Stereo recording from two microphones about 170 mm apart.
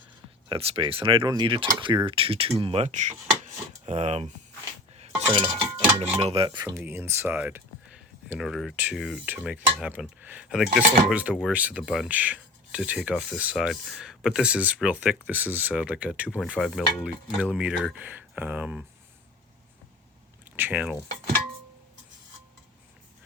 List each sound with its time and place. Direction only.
0.4 s speech: 35° right (ahead or behind)
5.3 s speech: 30° right (ahead or behind)
6.7 s speech: 10° right (ahead or behind)
8.3 s speech: centre (ahead or behind)
20.4 s speech: 10° right (ahead or behind)